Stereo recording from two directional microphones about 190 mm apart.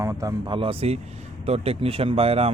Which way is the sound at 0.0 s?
15° right (ahead or behind).